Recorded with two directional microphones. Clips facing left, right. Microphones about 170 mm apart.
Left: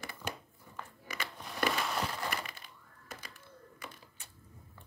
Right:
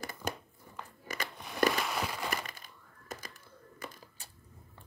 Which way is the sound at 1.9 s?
5° right (ahead or behind).